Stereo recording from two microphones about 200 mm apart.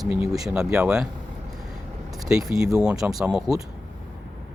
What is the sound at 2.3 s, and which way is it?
Speech, 5° right (ahead or behind).